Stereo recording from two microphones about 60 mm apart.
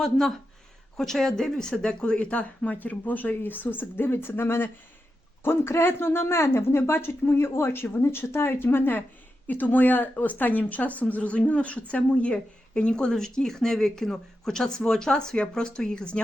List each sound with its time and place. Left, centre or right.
0.0 s speech: centre